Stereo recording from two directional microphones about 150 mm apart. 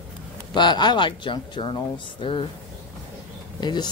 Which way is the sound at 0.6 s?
30° left (ahead or behind).